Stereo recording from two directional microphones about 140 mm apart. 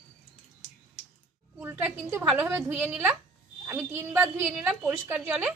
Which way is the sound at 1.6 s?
15° right (ahead or behind).